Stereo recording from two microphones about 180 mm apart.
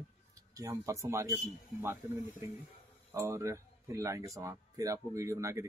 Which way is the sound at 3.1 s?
15° right (ahead or behind).